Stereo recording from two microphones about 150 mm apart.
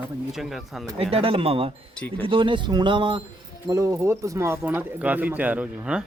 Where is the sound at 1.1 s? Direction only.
40° right (ahead or behind).